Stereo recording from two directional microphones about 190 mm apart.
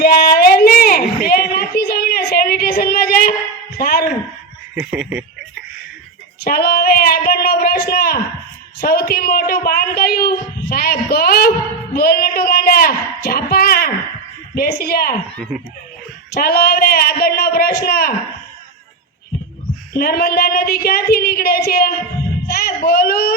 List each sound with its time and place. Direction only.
0.0 s a sound: 55° left (ahead or behind)
3.8 s music: 50° left (ahead or behind)
4.7 s speech: 5° right (ahead or behind)
6.4 s a man's voice: 55° left (ahead or behind)
11.9 s a sound: 55° left (ahead or behind)
14.5 s a man's voice: 55° left (ahead or behind)
16.3 s a man's voice: 55° left (ahead or behind)
20.0 s a man's voice: 55° left (ahead or behind)